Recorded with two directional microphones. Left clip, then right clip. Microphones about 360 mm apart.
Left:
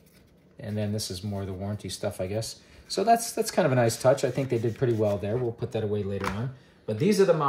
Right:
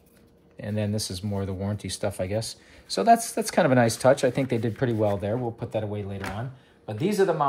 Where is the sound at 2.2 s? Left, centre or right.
Right.